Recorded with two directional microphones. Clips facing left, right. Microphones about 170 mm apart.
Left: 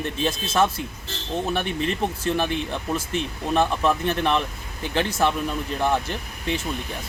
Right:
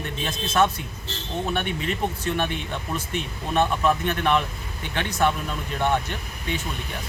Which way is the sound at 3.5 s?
30° left (ahead or behind).